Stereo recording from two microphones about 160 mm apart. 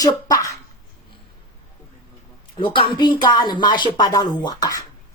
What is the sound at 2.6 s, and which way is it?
Speech, 30° left (ahead or behind).